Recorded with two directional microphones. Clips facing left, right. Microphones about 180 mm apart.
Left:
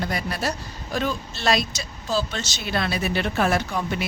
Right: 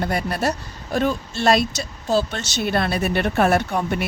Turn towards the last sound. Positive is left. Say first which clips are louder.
# right 4 dB
turn(degrees=-55)  # may be behind; listen again after turning